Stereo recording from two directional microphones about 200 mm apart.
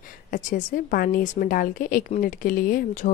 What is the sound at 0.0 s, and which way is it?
A woman's voice, 45° left (ahead or behind).